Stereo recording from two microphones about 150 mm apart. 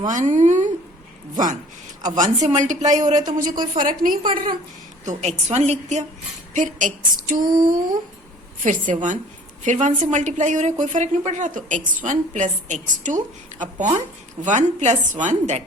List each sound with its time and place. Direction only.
0.1 s a woman's voice: 55° right (ahead or behind)
2.0 s a woman's voice: 55° right (ahead or behind)
3.3 s a woman's voice: 65° right (ahead or behind)
5.0 s a woman's voice: 45° right (ahead or behind); by 7.8 s 70° right (ahead or behind)
8.6 s a woman's voice: 55° right (ahead or behind)